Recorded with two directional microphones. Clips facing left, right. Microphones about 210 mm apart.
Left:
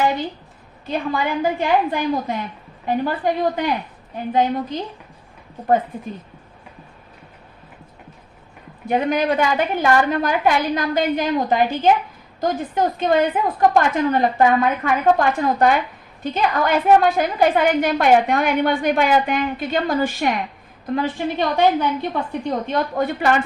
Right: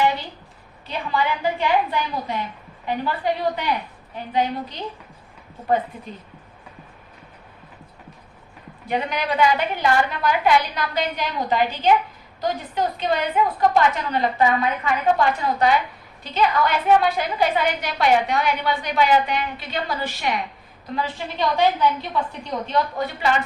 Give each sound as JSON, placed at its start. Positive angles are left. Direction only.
{"t": 0.9, "sound": "a woman's voice", "side_deg": 50}
{"t": 8.9, "sound": "a woman's voice", "side_deg": 50}